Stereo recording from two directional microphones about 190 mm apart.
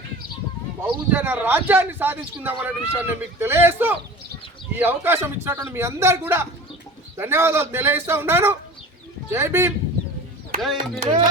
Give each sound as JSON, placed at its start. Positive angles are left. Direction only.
{"t": 1.1, "sound": "speech", "side_deg": -10}
{"t": 10.6, "sound": "speech", "side_deg": 0}
{"t": 11.0, "sound": "music", "side_deg": -25}